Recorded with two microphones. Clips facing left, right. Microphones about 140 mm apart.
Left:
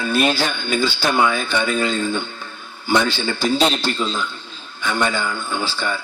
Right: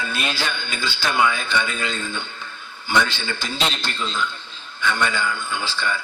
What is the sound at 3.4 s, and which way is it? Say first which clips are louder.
Speech: left 9 dB; 40° left (ahead or behind).